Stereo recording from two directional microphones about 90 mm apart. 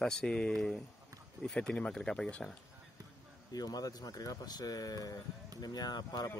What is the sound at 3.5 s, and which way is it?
Speech, 45° left (ahead or behind).